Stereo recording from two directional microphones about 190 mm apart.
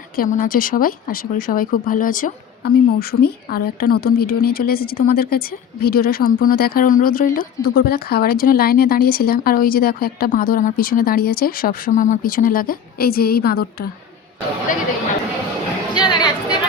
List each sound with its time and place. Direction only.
0.2 s speech: 45° left (ahead or behind)
16.0 s music: 20° left (ahead or behind)